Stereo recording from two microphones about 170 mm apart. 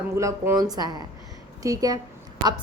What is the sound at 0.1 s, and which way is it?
A woman's voice, 15° right (ahead or behind).